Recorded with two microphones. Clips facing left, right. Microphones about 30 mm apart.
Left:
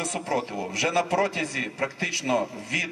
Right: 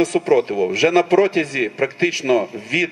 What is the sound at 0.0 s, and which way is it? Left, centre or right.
A man's voice, right.